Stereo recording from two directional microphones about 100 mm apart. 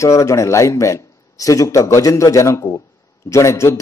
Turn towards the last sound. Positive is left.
turn(degrees=30)  # may be behind; listen again after turning